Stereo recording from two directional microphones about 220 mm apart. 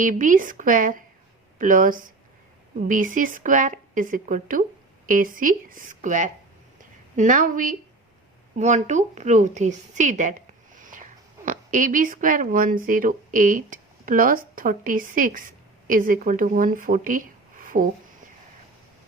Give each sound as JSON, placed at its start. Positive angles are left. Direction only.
{"t": 0.0, "sound": "a woman's voice", "side_deg": -35}